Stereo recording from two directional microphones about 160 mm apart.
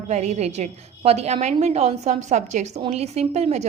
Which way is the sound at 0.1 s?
45° right (ahead or behind).